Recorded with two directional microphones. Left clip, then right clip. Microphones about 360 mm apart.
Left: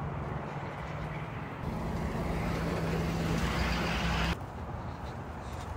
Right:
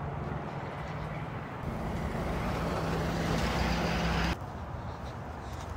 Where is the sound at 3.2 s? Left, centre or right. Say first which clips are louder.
Right 2 dB; right.